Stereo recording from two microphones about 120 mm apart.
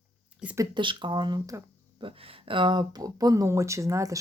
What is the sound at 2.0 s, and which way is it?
Speech, 50° right (ahead or behind).